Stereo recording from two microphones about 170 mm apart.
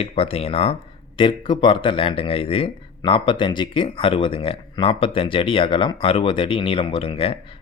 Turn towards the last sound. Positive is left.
turn(degrees=35)  # may be behind; listen again after turning